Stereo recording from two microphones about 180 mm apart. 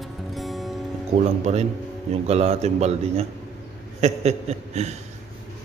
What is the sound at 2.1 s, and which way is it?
A man's voice, 35° right (ahead or behind).